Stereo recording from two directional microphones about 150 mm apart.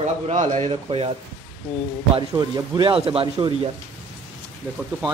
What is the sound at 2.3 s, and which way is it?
Speech, 25° right (ahead or behind).